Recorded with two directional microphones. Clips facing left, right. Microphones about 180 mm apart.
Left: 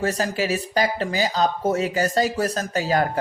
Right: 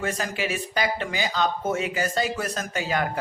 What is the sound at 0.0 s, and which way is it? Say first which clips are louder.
A man's voice: left 5 dB; 35° left (ahead or behind).